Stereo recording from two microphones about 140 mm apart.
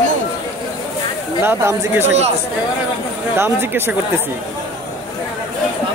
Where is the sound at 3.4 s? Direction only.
15° right (ahead or behind).